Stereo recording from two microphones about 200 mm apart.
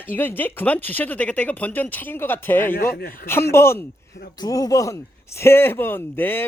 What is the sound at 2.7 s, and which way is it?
Speech, 45° left (ahead or behind).